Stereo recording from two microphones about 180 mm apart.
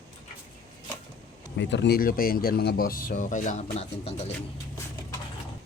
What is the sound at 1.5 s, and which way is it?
Speech, 80° left.